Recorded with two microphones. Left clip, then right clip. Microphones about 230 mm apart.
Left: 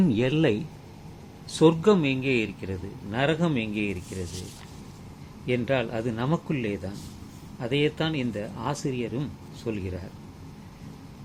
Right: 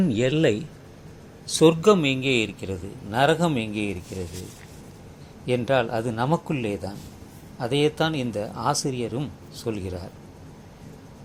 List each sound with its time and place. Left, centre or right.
0.0 s a man's voice: centre
5.5 s a man's voice: centre